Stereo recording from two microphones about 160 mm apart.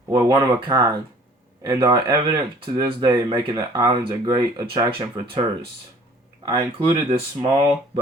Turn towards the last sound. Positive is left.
turn(degrees=-35)  # may be behind; listen again after turning